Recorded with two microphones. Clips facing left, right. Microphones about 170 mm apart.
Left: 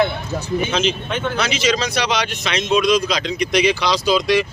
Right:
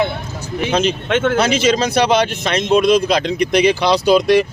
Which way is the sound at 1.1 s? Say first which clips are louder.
Right 7 dB; 80° right.